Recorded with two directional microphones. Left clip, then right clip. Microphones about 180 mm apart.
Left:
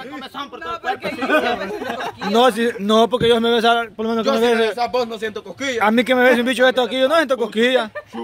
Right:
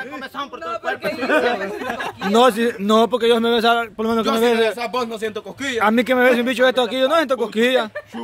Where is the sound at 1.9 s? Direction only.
30° right (ahead or behind).